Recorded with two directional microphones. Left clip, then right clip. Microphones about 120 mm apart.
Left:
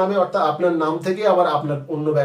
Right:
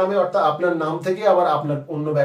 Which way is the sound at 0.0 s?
20° left (ahead or behind).